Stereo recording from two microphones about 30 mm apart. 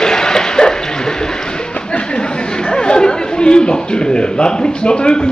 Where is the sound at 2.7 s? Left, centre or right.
Left.